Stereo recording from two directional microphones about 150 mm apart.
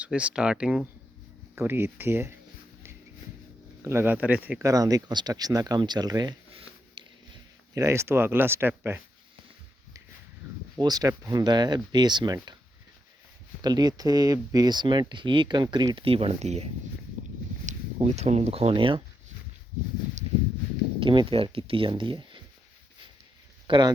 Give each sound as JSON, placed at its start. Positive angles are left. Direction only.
{"t": 0.0, "sound": "speech", "side_deg": -10}
{"t": 3.8, "sound": "speech", "side_deg": -15}
{"t": 4.6, "sound": "speech", "side_deg": -25}
{"t": 7.7, "sound": "speech", "side_deg": -20}
{"t": 10.8, "sound": "speech", "side_deg": -25}
{"t": 13.6, "sound": "speech", "side_deg": -25}
{"t": 17.7, "sound": "speech", "side_deg": -50}
{"t": 21.0, "sound": "speech", "side_deg": -35}
{"t": 23.6, "sound": "speech", "side_deg": -30}